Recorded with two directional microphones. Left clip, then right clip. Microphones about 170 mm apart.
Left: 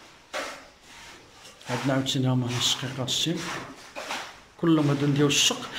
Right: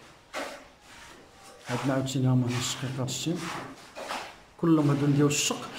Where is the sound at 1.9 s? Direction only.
5° right (ahead or behind).